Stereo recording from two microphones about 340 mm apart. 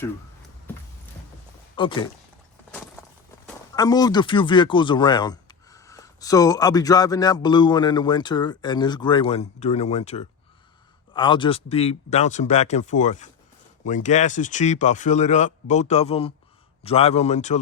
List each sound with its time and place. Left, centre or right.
1.7 s speech: centre
2.7 s a sound: centre
3.4 s speech: centre